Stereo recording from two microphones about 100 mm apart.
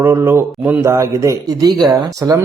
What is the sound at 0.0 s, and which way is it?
A man's voice, 25° right (ahead or behind).